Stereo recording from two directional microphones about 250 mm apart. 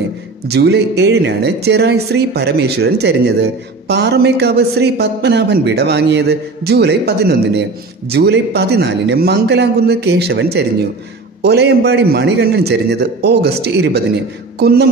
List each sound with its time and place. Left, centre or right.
0.5 s a man's voice: right